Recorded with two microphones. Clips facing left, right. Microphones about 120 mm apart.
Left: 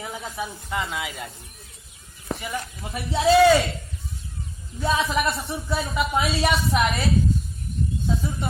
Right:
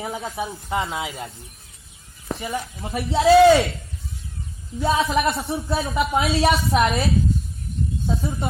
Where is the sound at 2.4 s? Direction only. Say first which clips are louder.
Right 3 dB; 25° right (ahead or behind).